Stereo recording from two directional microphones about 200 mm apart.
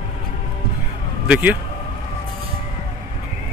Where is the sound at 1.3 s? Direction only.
10° right (ahead or behind).